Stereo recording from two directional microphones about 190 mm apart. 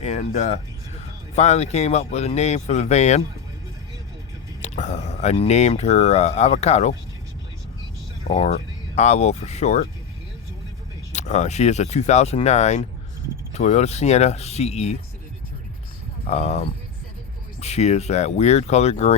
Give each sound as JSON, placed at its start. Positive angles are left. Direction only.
{"t": 0.0, "sound": "speech", "side_deg": 35}
{"t": 4.6, "sound": "speech", "side_deg": 40}
{"t": 8.3, "sound": "speech", "side_deg": 30}
{"t": 11.1, "sound": "speech", "side_deg": 40}
{"t": 16.2, "sound": "speech", "side_deg": 35}